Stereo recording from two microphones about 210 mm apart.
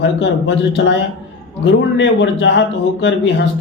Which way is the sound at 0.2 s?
55° left (ahead or behind).